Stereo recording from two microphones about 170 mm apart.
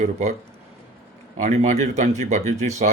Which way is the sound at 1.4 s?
45° right (ahead or behind).